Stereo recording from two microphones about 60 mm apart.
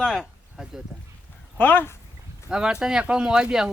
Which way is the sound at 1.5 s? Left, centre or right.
Left.